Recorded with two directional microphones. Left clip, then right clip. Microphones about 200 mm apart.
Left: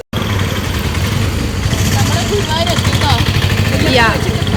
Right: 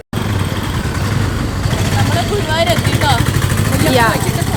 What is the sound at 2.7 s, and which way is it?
Speech, 50° right (ahead or behind).